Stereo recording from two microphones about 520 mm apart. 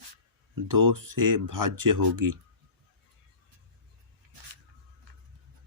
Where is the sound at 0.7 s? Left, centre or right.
Right.